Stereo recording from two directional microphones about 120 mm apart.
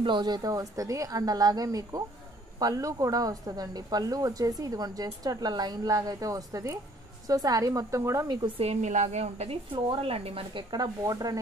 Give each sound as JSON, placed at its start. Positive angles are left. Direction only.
{"t": 0.0, "sound": "a woman's voice", "side_deg": -40}
{"t": 8.5, "sound": "a woman's voice", "side_deg": -70}
{"t": 9.7, "sound": "a woman's voice", "side_deg": -45}
{"t": 10.7, "sound": "speech", "side_deg": -30}